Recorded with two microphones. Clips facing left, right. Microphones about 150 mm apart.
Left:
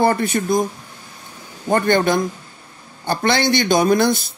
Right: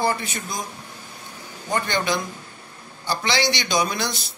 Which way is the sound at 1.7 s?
50° left (ahead or behind).